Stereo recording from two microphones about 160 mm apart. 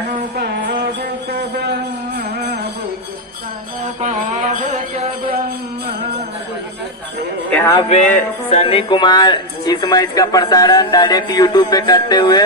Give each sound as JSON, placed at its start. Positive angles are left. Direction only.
{"t": 1.5, "sound": "a sound", "side_deg": -90}
{"t": 4.0, "sound": "mantra", "side_deg": -50}
{"t": 7.5, "sound": "a man's voice", "side_deg": 15}
{"t": 7.9, "sound": "speech", "side_deg": 50}